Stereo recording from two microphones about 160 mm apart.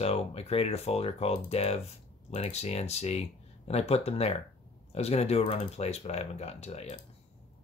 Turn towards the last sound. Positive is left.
turn(degrees=40)  # may be behind; listen again after turning